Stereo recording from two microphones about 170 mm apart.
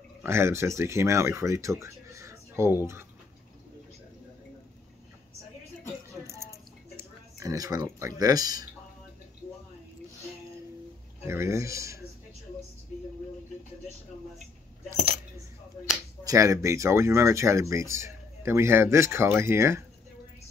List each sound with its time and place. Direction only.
0.2 s speech: 15° right (ahead or behind)
6.2 s a sound: 15° right (ahead or behind)
7.0 s speech: 20° right (ahead or behind)
11.2 s speech: 15° right (ahead or behind)
16.3 s speech: 20° right (ahead or behind)